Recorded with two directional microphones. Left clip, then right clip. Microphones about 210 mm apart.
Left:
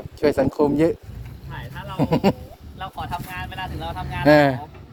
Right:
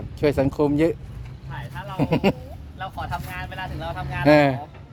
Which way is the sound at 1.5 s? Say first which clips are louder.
Left 1 dB; centre (ahead or behind).